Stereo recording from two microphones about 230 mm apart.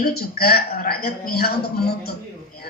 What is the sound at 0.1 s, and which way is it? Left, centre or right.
A woman's voice, left.